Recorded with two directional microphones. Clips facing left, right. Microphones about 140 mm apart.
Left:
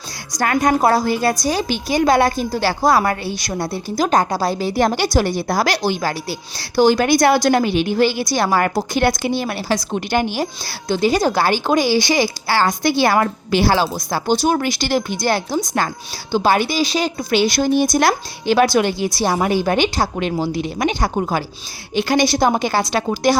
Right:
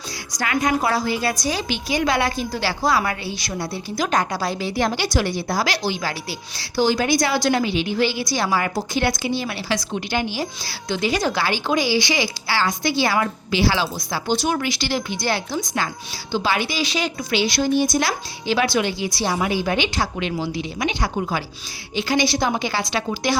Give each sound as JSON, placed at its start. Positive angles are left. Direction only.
{"t": 0.3, "sound": "a woman's voice", "side_deg": 45}